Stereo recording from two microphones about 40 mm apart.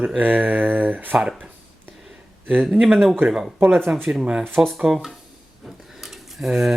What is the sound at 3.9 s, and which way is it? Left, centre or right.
Speech, right.